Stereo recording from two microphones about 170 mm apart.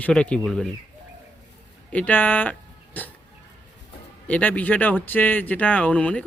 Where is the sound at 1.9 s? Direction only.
10° left (ahead or behind).